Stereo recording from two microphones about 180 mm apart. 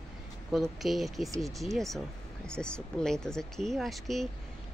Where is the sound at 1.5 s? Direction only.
Centre (ahead or behind).